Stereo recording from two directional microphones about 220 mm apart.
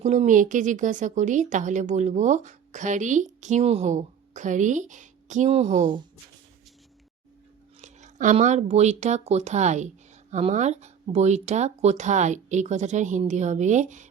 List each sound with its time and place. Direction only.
0.0 s speech: 30° right (ahead or behind)
7.8 s speech: 30° right (ahead or behind)